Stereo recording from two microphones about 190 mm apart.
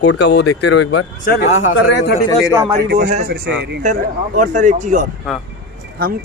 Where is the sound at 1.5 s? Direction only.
90° left.